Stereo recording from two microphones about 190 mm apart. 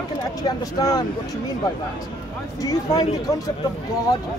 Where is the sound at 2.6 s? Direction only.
20° left (ahead or behind).